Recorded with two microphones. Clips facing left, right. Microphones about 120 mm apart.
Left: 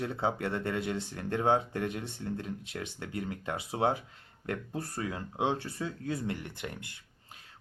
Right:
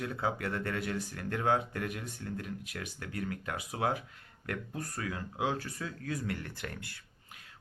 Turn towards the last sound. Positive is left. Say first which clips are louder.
# left 1 dB
turn(degrees=20)  # may be behind; listen again after turning